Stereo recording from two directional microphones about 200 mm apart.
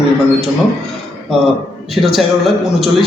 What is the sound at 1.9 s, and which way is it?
Speech, centre (ahead or behind).